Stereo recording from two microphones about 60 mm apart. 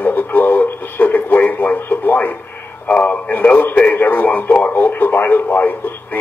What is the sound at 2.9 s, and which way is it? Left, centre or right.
A man's voice, left.